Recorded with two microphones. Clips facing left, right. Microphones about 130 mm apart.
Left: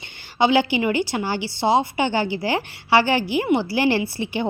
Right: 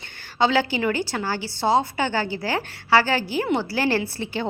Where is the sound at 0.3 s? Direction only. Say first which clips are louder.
Left 3 dB; 15° left (ahead or behind).